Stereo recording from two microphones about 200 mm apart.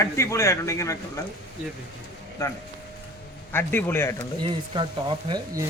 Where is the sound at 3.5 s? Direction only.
10° left (ahead or behind).